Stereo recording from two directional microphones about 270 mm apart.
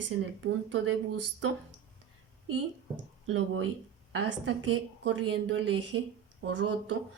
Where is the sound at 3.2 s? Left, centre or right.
Right.